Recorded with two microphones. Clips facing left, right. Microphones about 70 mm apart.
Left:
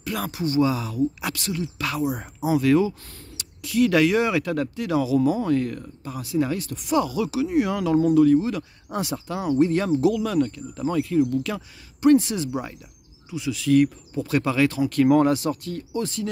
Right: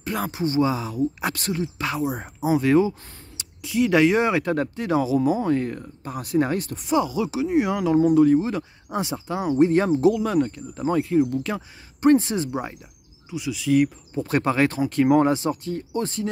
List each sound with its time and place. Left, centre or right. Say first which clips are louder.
0.0 s speech: right 2 dB; right
6.1 s speech: right 2 dB; right
6.9 s speech: even; right
13.3 s speech: left 1 dB; centre
14.1 s speech: right 2 dB; right
14.9 s speech: even; right